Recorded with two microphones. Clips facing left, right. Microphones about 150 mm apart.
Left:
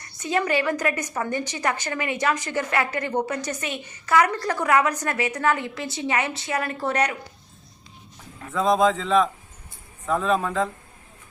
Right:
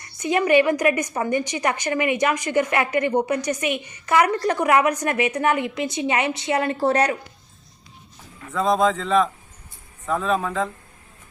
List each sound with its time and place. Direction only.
0.2 s a woman's voice: 15° right (ahead or behind); by 7.2 s 30° right (ahead or behind)
8.4 s a man's voice: centre (ahead or behind)